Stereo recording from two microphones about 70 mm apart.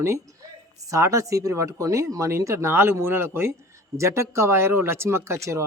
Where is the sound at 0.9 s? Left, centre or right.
Right.